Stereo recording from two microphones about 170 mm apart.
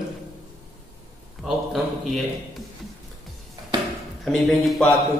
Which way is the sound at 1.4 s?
Centre (ahead or behind).